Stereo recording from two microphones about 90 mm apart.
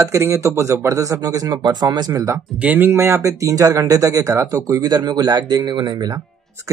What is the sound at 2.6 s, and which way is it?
Speech, 20° right (ahead or behind).